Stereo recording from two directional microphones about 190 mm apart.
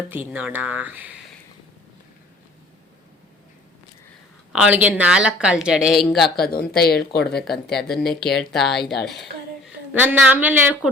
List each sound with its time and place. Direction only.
0.1 s speech: 10° right (ahead or behind)
4.5 s speech: 5° right (ahead or behind)
6.3 s speech: 55° left (ahead or behind)
7.4 s speech: centre (ahead or behind)
9.9 s speech: 10° right (ahead or behind)